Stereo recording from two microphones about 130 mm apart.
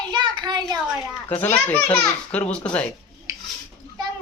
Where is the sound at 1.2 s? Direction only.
15° left (ahead or behind).